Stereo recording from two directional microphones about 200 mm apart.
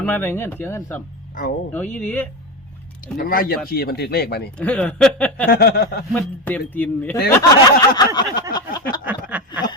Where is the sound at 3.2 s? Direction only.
45° left (ahead or behind).